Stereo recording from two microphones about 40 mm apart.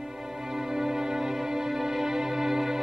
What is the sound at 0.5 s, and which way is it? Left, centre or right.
Music, centre.